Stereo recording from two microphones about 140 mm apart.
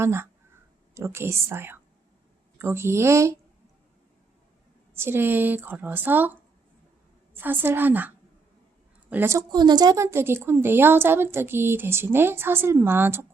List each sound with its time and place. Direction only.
0.0 s a woman's voice: 20° right (ahead or behind)
4.9 s a woman's voice: 15° right (ahead or behind)
7.3 s a woman's voice: 15° right (ahead or behind)
9.5 s a woman's voice: 30° right (ahead or behind)